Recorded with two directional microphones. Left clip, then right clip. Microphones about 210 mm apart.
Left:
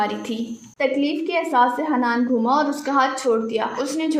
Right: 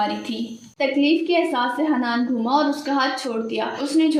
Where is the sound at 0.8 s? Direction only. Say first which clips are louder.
Right 2 dB; 40° left (ahead or behind).